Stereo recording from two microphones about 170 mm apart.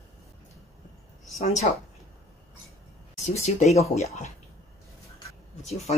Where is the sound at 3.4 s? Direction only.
40° left (ahead or behind).